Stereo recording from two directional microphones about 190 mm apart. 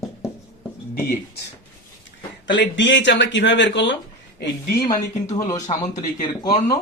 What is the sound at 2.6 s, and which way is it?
Speech, 70° left (ahead or behind).